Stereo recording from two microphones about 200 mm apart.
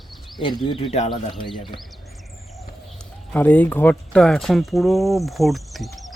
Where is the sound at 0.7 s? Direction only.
30° left (ahead or behind).